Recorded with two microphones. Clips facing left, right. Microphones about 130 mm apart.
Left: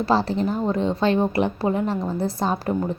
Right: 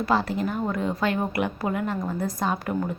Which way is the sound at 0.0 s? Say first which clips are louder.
Left 3 dB; 30° left (ahead or behind).